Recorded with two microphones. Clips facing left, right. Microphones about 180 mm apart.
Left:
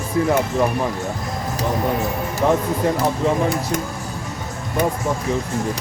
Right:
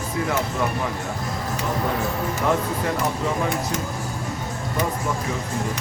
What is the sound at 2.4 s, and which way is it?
Speech, 25° left (ahead or behind).